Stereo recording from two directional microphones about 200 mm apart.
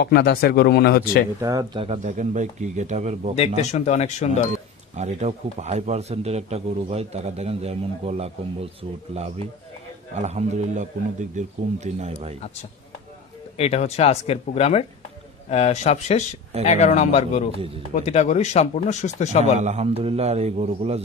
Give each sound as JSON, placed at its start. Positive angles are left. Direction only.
{"t": 0.0, "sound": "speech", "side_deg": 50}
{"t": 1.4, "sound": "a man's voice", "side_deg": -20}
{"t": 3.3, "sound": "speech", "side_deg": 35}
{"t": 4.9, "sound": "a man's voice", "side_deg": -35}
{"t": 13.6, "sound": "speech", "side_deg": 30}
{"t": 17.6, "sound": "speech", "side_deg": -25}
{"t": 17.9, "sound": "speech", "side_deg": 35}
{"t": 19.6, "sound": "a man's voice", "side_deg": -30}